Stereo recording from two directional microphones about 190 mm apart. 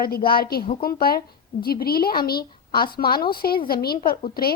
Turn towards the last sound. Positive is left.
turn(degrees=55)  # may be behind; listen again after turning